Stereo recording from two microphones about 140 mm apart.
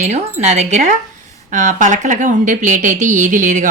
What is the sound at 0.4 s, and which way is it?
Speech, 50° right (ahead or behind).